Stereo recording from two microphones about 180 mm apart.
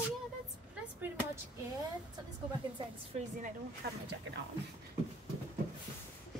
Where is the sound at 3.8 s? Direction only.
60° right (ahead or behind).